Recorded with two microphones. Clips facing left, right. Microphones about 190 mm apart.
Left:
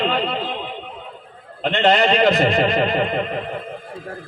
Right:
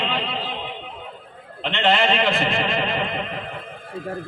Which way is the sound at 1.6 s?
40° left (ahead or behind).